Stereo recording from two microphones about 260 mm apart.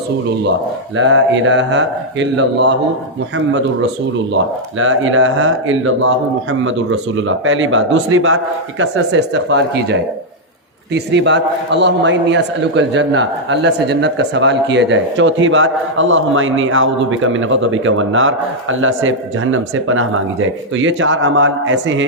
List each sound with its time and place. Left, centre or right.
0.9 s a man's voice: right
4.8 s a man's voice: right